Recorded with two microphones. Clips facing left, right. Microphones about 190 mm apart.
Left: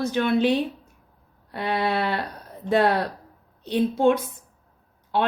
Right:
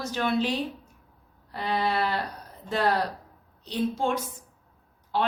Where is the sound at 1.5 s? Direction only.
65° left (ahead or behind).